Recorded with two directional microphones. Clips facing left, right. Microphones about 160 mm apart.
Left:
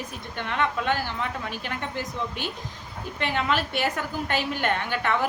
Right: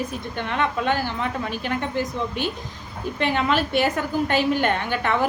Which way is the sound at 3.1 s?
25° right (ahead or behind).